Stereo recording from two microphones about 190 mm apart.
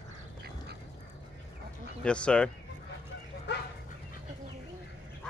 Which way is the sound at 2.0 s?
5° left (ahead or behind).